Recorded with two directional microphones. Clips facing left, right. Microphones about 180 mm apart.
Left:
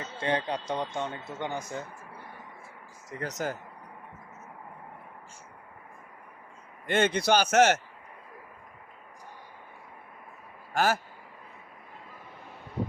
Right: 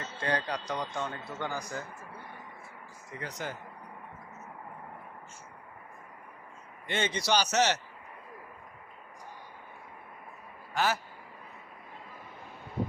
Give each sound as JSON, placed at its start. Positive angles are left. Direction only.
{"t": 0.0, "sound": "speech", "side_deg": 25}
{"t": 3.1, "sound": "a man's voice", "side_deg": 45}
{"t": 6.8, "sound": "a man's voice", "side_deg": 50}
{"t": 10.8, "sound": "a man's voice", "side_deg": 50}